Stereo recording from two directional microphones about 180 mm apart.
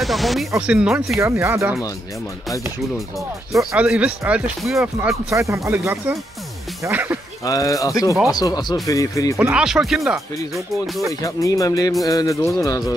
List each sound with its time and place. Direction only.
0.0 s speech: centre (ahead or behind)
3.5 s speech: 5° right (ahead or behind)
5.3 s speech: 15° right (ahead or behind)
7.4 s speech: 20° left (ahead or behind)
9.4 s speech: 5° right (ahead or behind)
10.5 s speech: 15° right (ahead or behind)
11.1 s speech: 20° left (ahead or behind)